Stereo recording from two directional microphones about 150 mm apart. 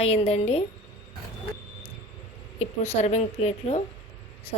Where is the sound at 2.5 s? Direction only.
45° left (ahead or behind).